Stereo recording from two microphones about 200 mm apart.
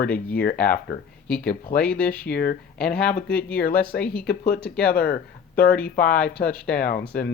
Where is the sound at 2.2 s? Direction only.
50° left (ahead or behind).